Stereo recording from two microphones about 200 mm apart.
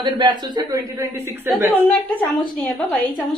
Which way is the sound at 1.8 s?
5° left (ahead or behind).